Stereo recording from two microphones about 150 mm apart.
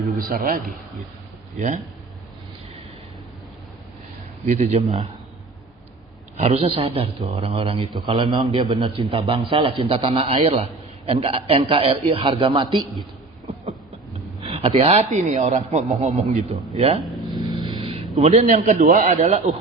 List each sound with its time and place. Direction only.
0.2 s speech: 70° right (ahead or behind)
1.5 s speech: 55° right (ahead or behind)
4.6 s a man's voice: 45° right (ahead or behind)
6.3 s a man's voice: 45° right (ahead or behind)
14.4 s a man's voice: 40° right (ahead or behind)
17.5 s a sound: 30° right (ahead or behind); by 19.0 s 65° right (ahead or behind)
19.0 s a man's voice: 50° right (ahead or behind)